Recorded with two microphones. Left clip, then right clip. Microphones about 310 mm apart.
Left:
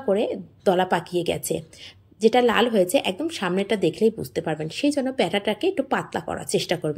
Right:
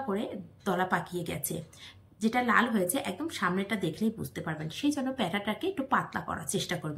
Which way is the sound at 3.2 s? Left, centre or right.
Centre.